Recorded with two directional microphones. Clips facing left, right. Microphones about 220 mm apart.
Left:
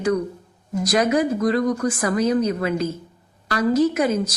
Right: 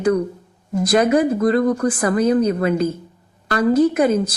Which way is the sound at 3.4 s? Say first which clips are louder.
Right 3 dB; 55° right (ahead or behind).